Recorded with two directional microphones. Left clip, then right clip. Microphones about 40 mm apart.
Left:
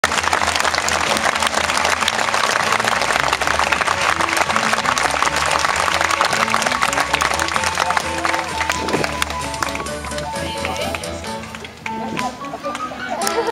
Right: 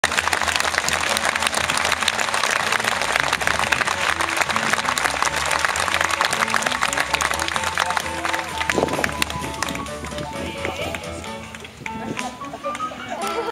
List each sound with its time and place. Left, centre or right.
0.0 s applause: right
4.6 s a sound: right
9.0 s music: right
13.2 s chicken: left